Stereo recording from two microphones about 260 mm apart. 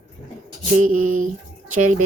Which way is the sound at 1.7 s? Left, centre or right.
Right.